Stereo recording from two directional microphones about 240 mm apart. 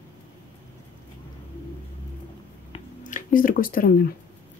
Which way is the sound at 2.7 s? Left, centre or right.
Left.